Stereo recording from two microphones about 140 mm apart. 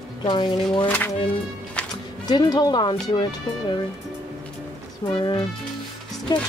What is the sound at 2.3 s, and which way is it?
Speech, 30° left (ahead or behind).